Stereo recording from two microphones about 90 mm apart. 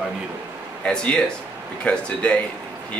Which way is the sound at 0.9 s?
10° left (ahead or behind).